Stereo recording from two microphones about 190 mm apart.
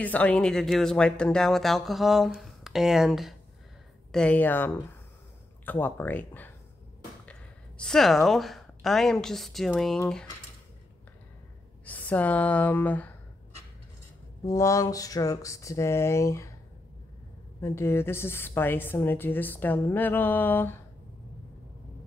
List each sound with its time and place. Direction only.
0.0 s a woman's voice: 5° left (ahead or behind)
11.8 s speech: 10° left (ahead or behind)
14.4 s a woman's voice: 15° left (ahead or behind)
17.6 s a woman's voice: 15° left (ahead or behind)